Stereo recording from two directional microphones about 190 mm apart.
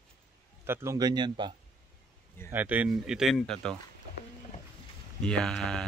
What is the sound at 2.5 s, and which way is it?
Speech, 10° right (ahead or behind).